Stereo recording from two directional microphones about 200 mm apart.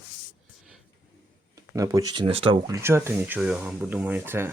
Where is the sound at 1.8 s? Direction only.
15° right (ahead or behind).